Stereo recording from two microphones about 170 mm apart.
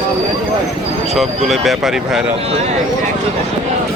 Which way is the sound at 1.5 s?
Centre (ahead or behind).